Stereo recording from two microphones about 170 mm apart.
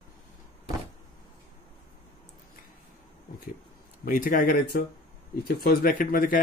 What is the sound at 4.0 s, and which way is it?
Speech, 55° left (ahead or behind).